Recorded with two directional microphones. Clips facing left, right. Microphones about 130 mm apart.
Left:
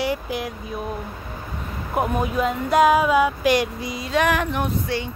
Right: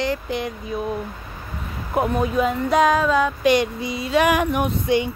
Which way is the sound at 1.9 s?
5° left (ahead or behind).